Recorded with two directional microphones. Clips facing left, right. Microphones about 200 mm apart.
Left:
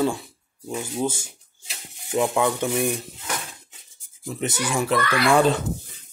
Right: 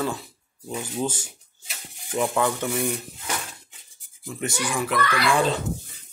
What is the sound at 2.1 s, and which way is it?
Speech, 20° left (ahead or behind).